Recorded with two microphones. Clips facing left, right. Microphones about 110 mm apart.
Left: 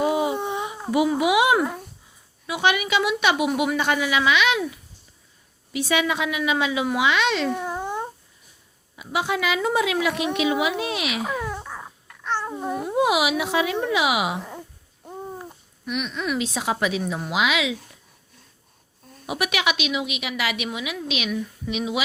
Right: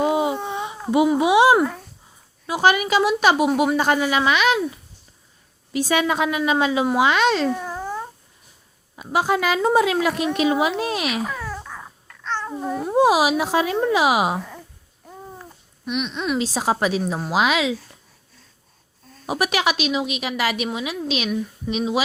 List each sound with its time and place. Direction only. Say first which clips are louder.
0.0 s a sound: right 2 dB; 25° right (ahead or behind)
0.3 s a sound: left 1 dB; 20° left (ahead or behind)
0.9 s a woman's voice: right 3 dB; 25° right (ahead or behind); by 7.5 s 40° right (ahead or behind)
7.5 s a sound: even; 20° left (ahead or behind)
9.0 s a woman's voice: right 4 dB; 40° right (ahead or behind)
11.2 s babbling: left 1 dB; 15° left (ahead or behind)
12.5 s babbling: right 1 dB; 5° left (ahead or behind)
12.8 s a woman's voice: right 5 dB; 35° right (ahead or behind)
15.9 s speech: right 3 dB; 20° right (ahead or behind)
16.4 s a woman's voice: right 4 dB; 35° right (ahead or behind)
19.3 s a woman's voice: right 3 dB; 35° right (ahead or behind)